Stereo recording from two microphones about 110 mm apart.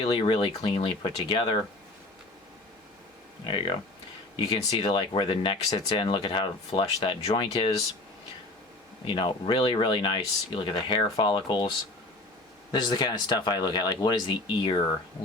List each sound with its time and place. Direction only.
0.0 s speech: 50° left (ahead or behind)
3.4 s speech: 50° left (ahead or behind)
9.0 s speech: 45° left (ahead or behind)
12.7 s speech: 40° left (ahead or behind)